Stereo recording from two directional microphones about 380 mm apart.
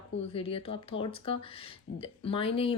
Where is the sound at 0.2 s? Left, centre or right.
Centre.